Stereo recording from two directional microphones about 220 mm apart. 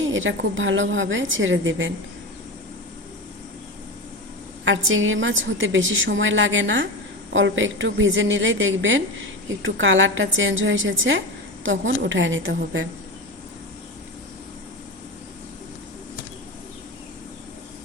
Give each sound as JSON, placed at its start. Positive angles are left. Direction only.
{"t": 0.1, "sound": "a woman's voice", "side_deg": -60}
{"t": 4.6, "sound": "a woman's voice", "side_deg": -60}